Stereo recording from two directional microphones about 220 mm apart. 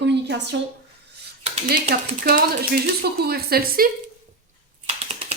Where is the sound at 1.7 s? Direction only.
40° right (ahead or behind).